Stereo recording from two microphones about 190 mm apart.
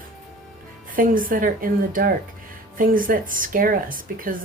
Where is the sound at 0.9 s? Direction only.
45° right (ahead or behind).